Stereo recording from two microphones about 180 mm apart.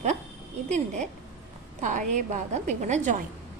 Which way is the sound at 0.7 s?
40° right (ahead or behind).